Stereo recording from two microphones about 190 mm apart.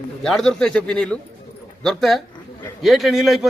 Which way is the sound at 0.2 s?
Centre (ahead or behind).